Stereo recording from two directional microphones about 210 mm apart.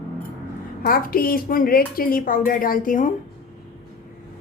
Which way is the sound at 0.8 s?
45° left (ahead or behind).